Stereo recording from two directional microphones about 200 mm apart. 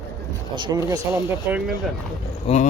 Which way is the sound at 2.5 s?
30° left (ahead or behind).